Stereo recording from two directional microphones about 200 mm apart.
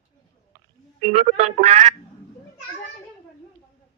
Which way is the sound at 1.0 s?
30° right (ahead or behind).